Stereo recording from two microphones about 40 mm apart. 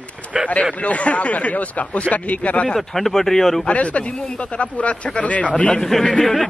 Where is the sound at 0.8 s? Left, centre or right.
Left.